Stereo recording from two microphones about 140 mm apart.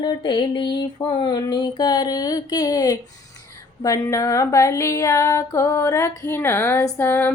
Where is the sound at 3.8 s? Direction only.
25° left (ahead or behind).